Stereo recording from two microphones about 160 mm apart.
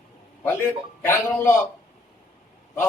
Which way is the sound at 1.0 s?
15° left (ahead or behind).